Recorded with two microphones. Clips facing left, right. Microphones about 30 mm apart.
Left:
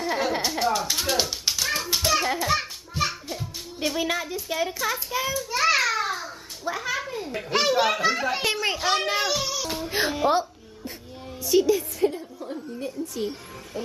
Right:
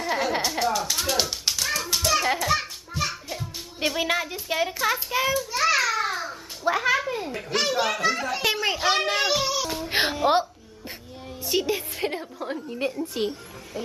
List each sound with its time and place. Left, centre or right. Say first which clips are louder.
0.0 s speech: even; centre
1.8 s a sound: right 1 dB; centre
2.3 s speech: even; centre
2.9 s music: left 2 dB; centre
3.8 s a child's voice: right 2 dB; centre
5.5 s a sound: left 4 dB; centre
6.0 s a sound: right 1 dB; centre
7.3 s a child's voice: left 4 dB; centre
8.5 s a child's voice: right 3 dB; centre
9.3 s child singing: right 3 dB; centre
9.8 s music: right 1 dB; right
11.4 s a woman's voice: left 5 dB; right
12.0 s a woman's voice: left 3 dB; right
13.0 s a woman's voice: right 2 dB; right